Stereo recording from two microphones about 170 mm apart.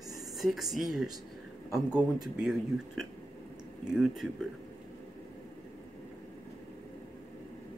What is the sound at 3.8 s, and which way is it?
Speech, 5° right (ahead or behind).